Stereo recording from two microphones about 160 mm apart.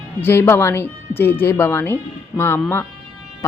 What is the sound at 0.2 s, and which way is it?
Speech, 15° left (ahead or behind).